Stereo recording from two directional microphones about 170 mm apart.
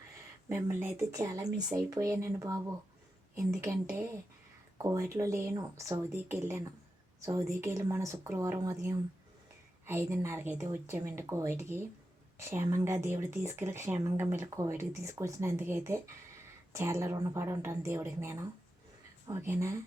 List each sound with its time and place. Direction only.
0.4 s speech: 15° right (ahead or behind)